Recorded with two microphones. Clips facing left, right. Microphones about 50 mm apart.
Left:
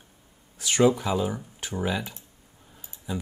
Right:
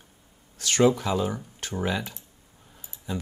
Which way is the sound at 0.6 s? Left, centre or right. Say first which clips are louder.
Even; centre.